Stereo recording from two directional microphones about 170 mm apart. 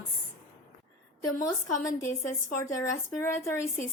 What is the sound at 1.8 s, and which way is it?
Speech, 15° left (ahead or behind).